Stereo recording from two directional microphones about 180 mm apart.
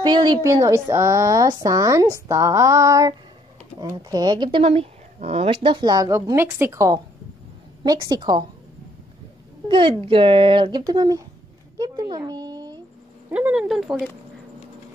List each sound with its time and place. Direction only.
0.0 s speech: 25° right (ahead or behind)
9.7 s speech: 30° right (ahead or behind)
11.8 s a sound: 20° right (ahead or behind)
13.3 s speech: 5° right (ahead or behind)